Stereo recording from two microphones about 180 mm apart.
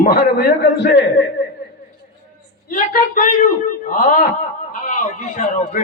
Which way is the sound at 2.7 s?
50° left (ahead or behind).